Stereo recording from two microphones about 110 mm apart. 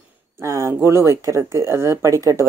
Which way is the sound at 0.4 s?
25° right (ahead or behind).